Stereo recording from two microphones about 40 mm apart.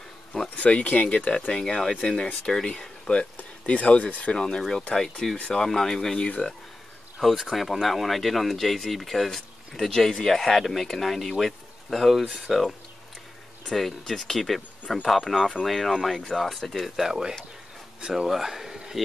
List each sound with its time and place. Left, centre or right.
0.6 s speech: left
1.5 s speech: centre
3.6 s speech: left
4.4 s speech: centre
6.1 s speech: left
7.2 s speech: centre